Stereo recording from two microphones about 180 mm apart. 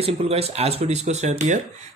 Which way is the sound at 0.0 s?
35° right (ahead or behind).